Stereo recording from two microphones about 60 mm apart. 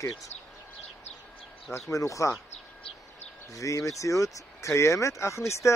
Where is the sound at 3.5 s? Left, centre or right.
Left.